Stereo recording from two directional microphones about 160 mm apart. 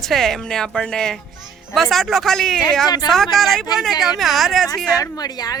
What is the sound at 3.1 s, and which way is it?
Speech, centre (ahead or behind).